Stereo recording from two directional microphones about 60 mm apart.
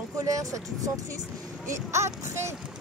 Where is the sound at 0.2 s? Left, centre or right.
Right.